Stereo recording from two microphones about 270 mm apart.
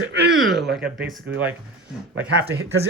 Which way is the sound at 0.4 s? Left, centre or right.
Centre.